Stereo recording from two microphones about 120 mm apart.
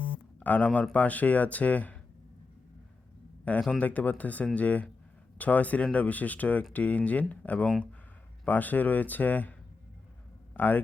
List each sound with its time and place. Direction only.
0.3 s speech: 15° left (ahead or behind)
3.4 s speech: 10° left (ahead or behind)